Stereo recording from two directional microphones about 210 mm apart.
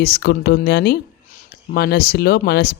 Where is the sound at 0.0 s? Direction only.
50° left (ahead or behind).